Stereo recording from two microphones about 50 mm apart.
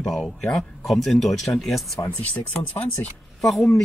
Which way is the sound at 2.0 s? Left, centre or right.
Left.